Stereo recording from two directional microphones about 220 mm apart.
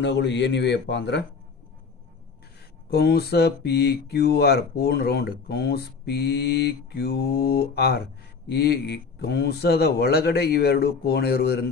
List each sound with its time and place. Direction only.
0.0 s speech: 50° left (ahead or behind)
2.9 s speech: 45° left (ahead or behind)